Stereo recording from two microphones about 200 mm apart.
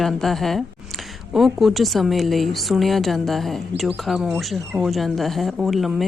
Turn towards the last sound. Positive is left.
turn(degrees=0)  # may be behind; listen again after turning